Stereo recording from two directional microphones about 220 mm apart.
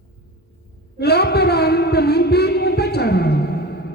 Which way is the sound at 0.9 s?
45° left (ahead or behind).